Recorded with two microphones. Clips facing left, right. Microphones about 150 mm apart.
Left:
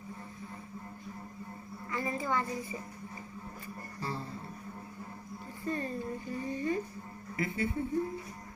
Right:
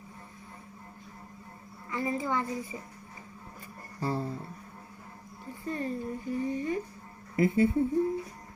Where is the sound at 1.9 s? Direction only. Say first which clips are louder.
Right 3 dB; 15° right (ahead or behind).